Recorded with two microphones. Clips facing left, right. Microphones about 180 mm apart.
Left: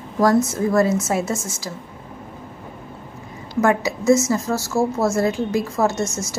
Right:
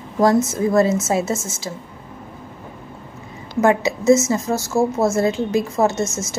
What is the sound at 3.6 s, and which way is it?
A woman's voice, 20° right (ahead or behind).